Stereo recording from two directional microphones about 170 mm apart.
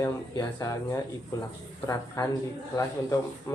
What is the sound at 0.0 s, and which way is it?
Speech, 20° left (ahead or behind).